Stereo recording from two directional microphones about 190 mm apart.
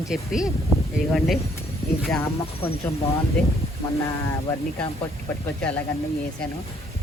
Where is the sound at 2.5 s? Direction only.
30° left (ahead or behind).